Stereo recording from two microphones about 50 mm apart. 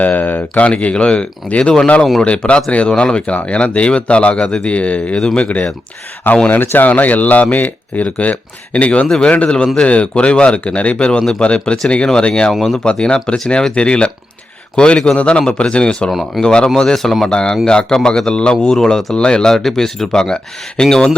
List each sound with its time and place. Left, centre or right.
0.0 s speech: left
0.6 s speech: left
6.5 s speech: left; by 12.5 s centre
12.5 s speech: centre
12.8 s speech: centre
17.2 s speech: centre